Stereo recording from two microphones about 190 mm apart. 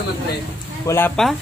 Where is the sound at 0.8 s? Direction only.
10° left (ahead or behind).